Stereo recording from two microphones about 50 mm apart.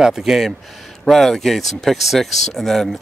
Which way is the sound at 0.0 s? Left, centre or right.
Centre.